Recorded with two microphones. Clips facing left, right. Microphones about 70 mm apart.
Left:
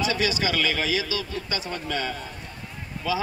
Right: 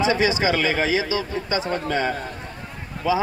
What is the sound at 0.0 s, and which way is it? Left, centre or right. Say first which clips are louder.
A man's voice: right 5 dB; right.